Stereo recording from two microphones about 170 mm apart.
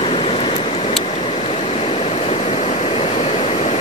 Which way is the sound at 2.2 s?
40° left (ahead or behind).